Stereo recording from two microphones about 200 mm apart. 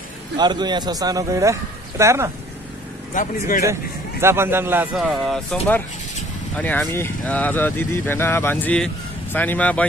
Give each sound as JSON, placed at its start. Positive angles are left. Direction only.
{"t": 0.4, "sound": "a man's voice", "side_deg": -20}
{"t": 3.2, "sound": "speech", "side_deg": 40}
{"t": 4.2, "sound": "speech", "side_deg": -10}